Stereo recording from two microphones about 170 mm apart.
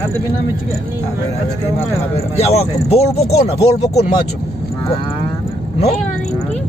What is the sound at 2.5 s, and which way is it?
Speech, 35° left (ahead or behind).